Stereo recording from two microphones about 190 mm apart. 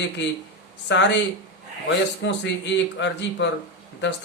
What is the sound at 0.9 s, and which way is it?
Speech, 70° left (ahead or behind).